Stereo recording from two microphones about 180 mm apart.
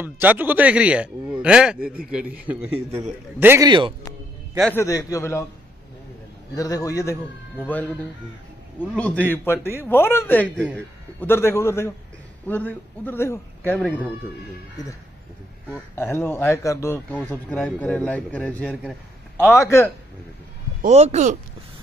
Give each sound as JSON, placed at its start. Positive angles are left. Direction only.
{"t": 0.0, "sound": "speech", "side_deg": -10}
{"t": 3.3, "sound": "speech", "side_deg": -10}
{"t": 3.6, "sound": "a man's voice", "side_deg": -25}
{"t": 4.6, "sound": "a man's voice", "side_deg": 5}
{"t": 4.8, "sound": "a man's voice", "side_deg": 20}
{"t": 6.5, "sound": "a man's voice", "side_deg": 20}
{"t": 8.9, "sound": "a man's voice", "side_deg": 5}
{"t": 15.9, "sound": "a man's voice", "side_deg": 10}
{"t": 20.8, "sound": "speech", "side_deg": -40}